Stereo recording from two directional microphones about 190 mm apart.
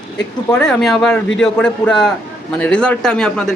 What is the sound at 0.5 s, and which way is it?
Speech, 5° left (ahead or behind).